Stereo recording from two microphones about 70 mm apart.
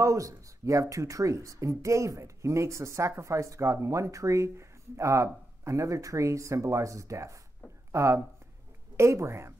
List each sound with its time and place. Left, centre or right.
0.0 s speech: right